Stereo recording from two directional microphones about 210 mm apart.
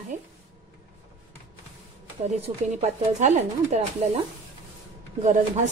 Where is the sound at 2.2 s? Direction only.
35° right (ahead or behind).